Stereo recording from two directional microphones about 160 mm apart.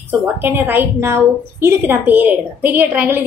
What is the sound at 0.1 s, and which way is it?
A woman's voice, 10° right (ahead or behind).